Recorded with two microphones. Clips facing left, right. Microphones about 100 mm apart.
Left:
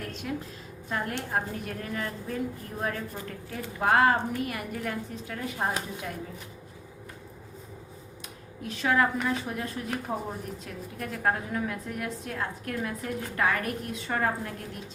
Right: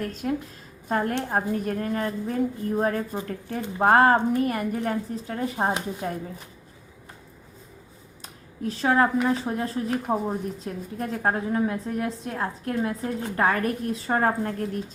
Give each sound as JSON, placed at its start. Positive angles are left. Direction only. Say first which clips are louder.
{"t": 0.1, "sound": "speech", "louder": "right 6 dB", "side_deg": -40}
{"t": 8.6, "sound": "speech", "louder": "right 4 dB", "side_deg": -35}